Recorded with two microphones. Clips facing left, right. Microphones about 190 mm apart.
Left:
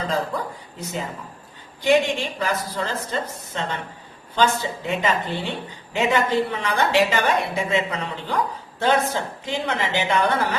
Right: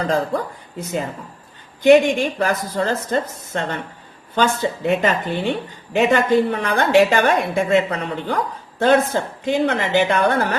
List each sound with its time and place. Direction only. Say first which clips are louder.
0.1 s a woman's voice: right 5 dB; 50° right (ahead or behind)